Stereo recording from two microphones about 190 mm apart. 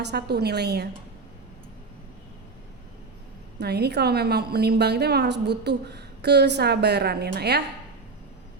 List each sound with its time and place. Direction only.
0.0 s a woman's voice: 60° right (ahead or behind)
3.6 s a woman's voice: 60° right (ahead or behind)